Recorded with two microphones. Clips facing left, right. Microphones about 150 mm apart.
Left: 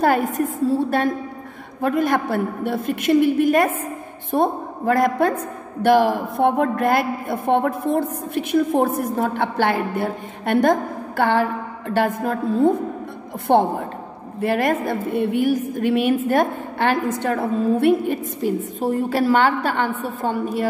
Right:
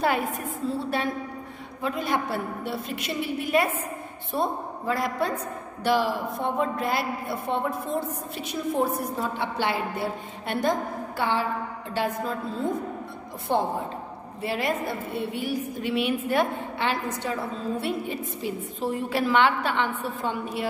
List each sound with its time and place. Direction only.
0.0 s a woman's voice: 45° left (ahead or behind)